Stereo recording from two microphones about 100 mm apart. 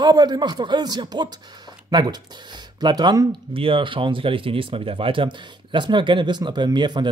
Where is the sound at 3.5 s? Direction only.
65° right (ahead or behind).